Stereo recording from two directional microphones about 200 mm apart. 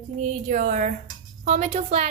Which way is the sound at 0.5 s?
40° right (ahead or behind).